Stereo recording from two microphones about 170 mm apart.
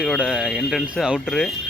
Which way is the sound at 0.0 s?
5° right (ahead or behind).